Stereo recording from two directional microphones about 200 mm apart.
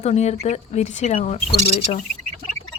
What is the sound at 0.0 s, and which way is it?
A woman's voice, 35° left (ahead or behind).